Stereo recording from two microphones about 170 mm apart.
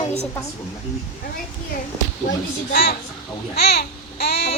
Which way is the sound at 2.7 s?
65° left (ahead or behind).